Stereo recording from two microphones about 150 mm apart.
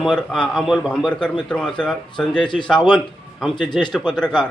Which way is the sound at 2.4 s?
30° left (ahead or behind).